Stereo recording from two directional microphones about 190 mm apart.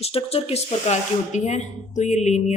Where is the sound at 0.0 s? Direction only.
30° left (ahead or behind).